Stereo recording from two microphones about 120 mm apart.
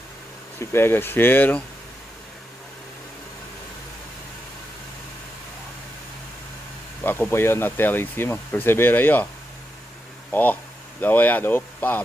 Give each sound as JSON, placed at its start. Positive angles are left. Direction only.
{"t": 0.6, "sound": "speech", "side_deg": 20}
{"t": 7.0, "sound": "speech", "side_deg": 15}
{"t": 10.3, "sound": "speech", "side_deg": 15}